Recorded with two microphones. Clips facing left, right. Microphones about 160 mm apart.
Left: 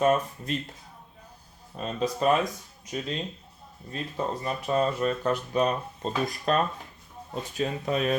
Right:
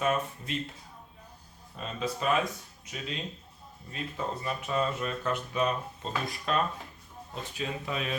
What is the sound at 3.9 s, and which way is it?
Speech, 35° left (ahead or behind).